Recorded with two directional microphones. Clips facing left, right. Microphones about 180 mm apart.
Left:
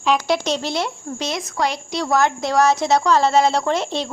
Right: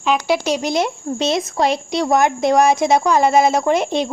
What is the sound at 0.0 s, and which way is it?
Speech, 5° right (ahead or behind).